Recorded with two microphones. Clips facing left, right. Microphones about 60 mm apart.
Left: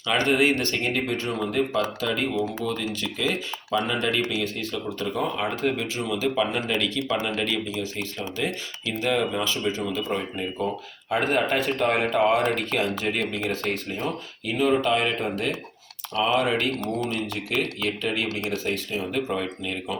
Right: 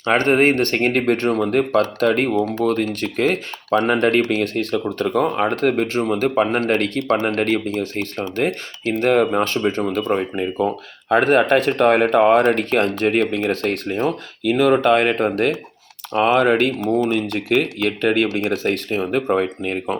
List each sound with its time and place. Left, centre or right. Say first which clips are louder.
0.0 s speech: right 6 dB; right
16.8 s speech: right 9 dB; centre
17.2 s speech: right 8 dB; right